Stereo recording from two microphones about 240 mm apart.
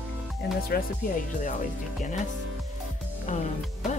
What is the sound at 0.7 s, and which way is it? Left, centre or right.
Speech, left.